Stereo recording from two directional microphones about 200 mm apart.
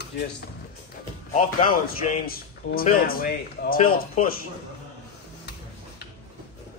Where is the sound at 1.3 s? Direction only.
40° left (ahead or behind).